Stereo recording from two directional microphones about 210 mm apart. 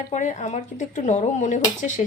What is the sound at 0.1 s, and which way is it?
Speech, 35° left (ahead or behind).